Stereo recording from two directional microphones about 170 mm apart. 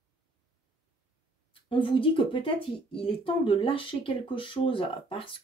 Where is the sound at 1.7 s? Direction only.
30° left (ahead or behind).